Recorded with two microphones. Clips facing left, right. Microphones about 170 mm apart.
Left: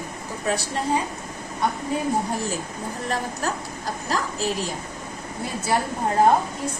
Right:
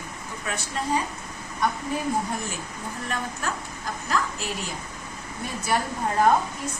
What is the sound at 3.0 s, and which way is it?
A woman's voice, 35° left (ahead or behind).